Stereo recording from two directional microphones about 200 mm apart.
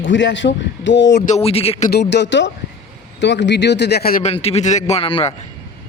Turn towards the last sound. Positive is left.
turn(degrees=30)  # may be behind; listen again after turning